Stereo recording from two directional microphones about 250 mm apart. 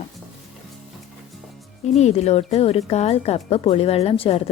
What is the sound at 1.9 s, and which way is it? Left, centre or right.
A woman's voice, left.